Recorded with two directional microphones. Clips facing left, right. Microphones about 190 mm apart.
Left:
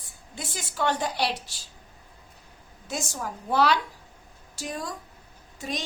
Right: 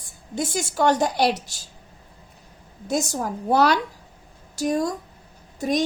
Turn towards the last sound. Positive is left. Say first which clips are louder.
# right 11 dB
turn(degrees=-45)  # may be behind; listen again after turning